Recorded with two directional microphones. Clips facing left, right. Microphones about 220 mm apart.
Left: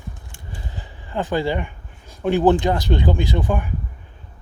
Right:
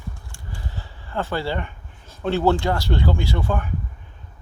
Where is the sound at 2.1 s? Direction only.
15° left (ahead or behind).